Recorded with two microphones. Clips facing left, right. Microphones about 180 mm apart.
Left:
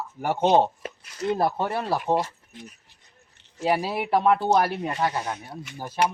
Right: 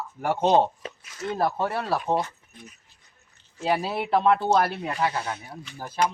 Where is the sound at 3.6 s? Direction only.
10° left (ahead or behind).